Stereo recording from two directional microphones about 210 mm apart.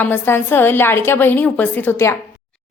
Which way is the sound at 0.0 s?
10° left (ahead or behind).